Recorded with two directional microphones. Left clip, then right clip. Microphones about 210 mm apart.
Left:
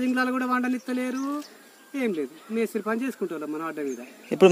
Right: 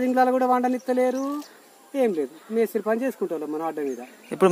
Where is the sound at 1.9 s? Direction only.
15° left (ahead or behind).